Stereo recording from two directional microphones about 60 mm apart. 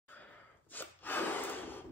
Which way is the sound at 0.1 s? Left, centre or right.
Left.